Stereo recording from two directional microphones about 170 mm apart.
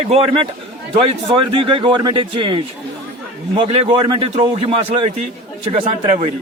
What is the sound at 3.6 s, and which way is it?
A man's voice, 35° right (ahead or behind).